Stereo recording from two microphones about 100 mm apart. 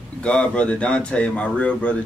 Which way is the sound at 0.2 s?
10° left (ahead or behind).